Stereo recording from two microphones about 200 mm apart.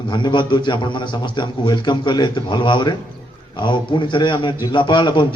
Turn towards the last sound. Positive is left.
turn(degrees=25)  # may be behind; listen again after turning